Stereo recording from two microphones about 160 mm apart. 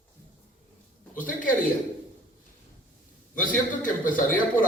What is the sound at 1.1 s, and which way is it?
Speech, 55° left (ahead or behind).